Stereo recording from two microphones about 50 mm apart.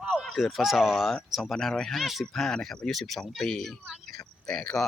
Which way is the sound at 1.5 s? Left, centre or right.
Centre.